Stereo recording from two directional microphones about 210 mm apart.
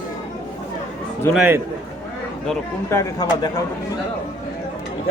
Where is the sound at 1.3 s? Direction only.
10° right (ahead or behind).